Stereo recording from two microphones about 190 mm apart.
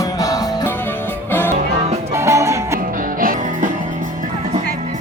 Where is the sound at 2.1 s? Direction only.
15° right (ahead or behind).